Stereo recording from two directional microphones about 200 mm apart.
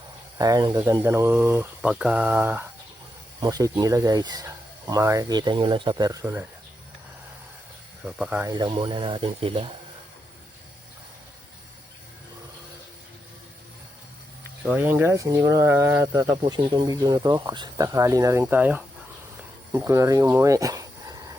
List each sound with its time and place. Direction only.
0.3 s speech: 20° right (ahead or behind)
8.0 s speech: 5° right (ahead or behind)
8.4 s speech: 20° right (ahead or behind)
14.6 s speech: 10° right (ahead or behind)